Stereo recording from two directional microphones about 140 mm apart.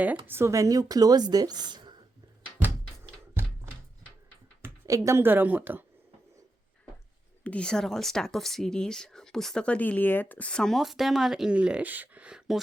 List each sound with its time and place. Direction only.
0.3 s speech: 20° right (ahead or behind)
2.6 s music: 15° right (ahead or behind)
4.6 s speech: 20° right (ahead or behind)
7.4 s speech: 5° left (ahead or behind)